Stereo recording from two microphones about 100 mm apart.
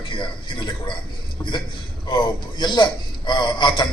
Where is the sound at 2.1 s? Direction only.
50° left (ahead or behind).